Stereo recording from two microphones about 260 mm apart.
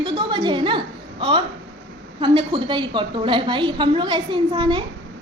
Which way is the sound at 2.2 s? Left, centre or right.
Centre.